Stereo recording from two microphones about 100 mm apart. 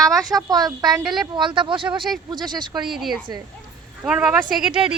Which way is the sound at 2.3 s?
45° right (ahead or behind).